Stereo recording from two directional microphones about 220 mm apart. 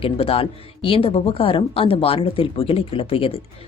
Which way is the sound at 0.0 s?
25° left (ahead or behind).